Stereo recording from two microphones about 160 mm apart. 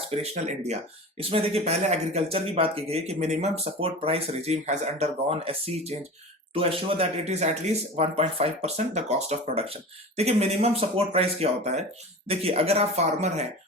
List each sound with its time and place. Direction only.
0.1 s speech: 45° right (ahead or behind)